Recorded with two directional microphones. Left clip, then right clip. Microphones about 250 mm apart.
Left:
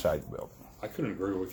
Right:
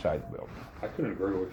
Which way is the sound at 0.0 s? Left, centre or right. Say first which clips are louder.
Left 1 dB; left.